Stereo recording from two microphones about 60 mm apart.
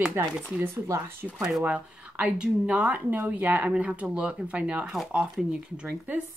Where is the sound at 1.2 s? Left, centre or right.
Centre.